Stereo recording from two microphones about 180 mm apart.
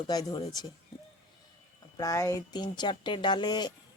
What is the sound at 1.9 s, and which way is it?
Speech, 20° left (ahead or behind).